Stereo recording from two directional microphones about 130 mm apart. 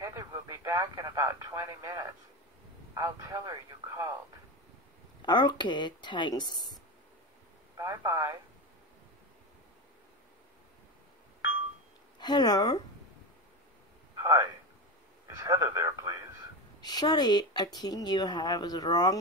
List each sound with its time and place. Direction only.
0.0 s speech: 20° right (ahead or behind)
5.2 s speech: 35° left (ahead or behind)
7.7 s speech: 25° right (ahead or behind)
12.2 s speech: 35° left (ahead or behind)
14.1 s a sound: 25° right (ahead or behind)
15.2 s radio: 25° right (ahead or behind)
16.8 s speech: 30° left (ahead or behind)